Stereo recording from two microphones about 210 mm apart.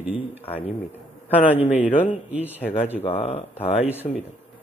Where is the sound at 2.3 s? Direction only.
10° right (ahead or behind).